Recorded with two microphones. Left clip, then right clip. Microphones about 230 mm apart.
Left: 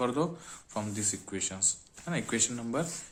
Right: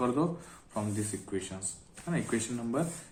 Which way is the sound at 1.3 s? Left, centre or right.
Left.